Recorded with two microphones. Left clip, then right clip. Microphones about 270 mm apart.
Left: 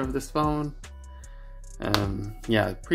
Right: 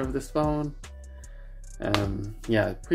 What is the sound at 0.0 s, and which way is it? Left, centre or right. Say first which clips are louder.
Speech: left 1 dB; centre.